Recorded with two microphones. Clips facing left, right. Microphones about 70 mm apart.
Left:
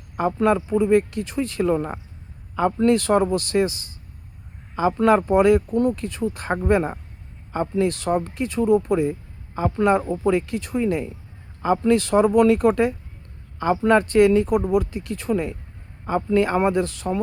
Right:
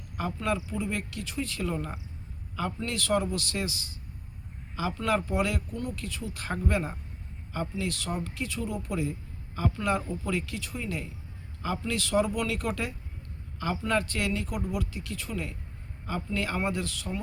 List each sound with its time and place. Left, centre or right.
0.2 s speech: left